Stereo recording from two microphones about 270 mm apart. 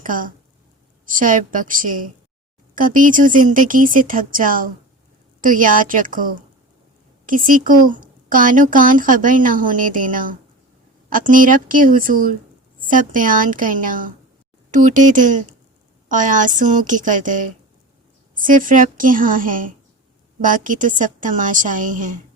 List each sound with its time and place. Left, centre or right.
0.0 s a woman's voice: right